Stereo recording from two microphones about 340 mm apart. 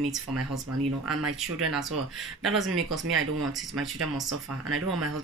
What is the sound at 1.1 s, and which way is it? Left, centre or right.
Speech, right.